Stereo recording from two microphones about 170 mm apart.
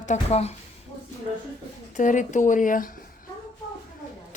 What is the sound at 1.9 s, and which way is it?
Speech, 50° left (ahead or behind).